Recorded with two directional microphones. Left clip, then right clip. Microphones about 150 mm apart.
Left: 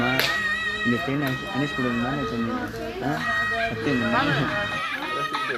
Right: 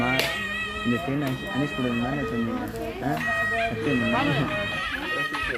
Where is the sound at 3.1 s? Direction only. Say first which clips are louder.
Left 1 dB; centre (ahead or behind).